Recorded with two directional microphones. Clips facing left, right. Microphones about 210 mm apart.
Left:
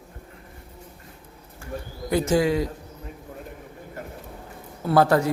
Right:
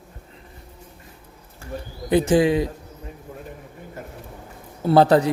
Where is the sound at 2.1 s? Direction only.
15° right (ahead or behind).